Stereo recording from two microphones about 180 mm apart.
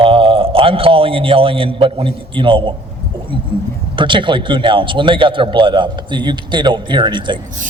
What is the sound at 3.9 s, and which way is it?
A man's voice, 25° right (ahead or behind).